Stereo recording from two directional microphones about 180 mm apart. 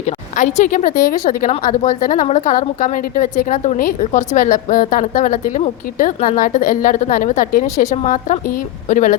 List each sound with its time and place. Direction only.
0.0 s a woman's voice: 40° left (ahead or behind)